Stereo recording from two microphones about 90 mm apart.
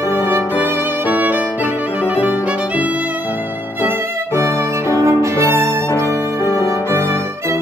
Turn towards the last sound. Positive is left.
turn(degrees=40)  # may be behind; listen again after turning